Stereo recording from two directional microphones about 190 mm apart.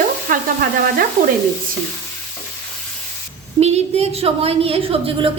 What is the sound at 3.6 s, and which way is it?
A woman's voice, 35° right (ahead or behind).